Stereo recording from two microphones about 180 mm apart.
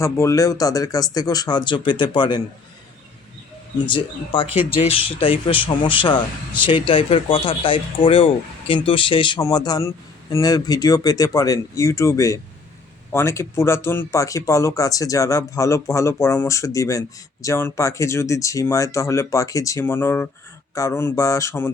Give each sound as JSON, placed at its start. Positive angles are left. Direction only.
{"t": 0.0, "sound": "a man's voice", "side_deg": 15}
{"t": 3.8, "sound": "a man's voice", "side_deg": 30}